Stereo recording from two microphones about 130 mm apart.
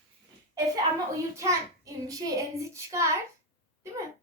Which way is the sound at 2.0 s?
25° right (ahead or behind).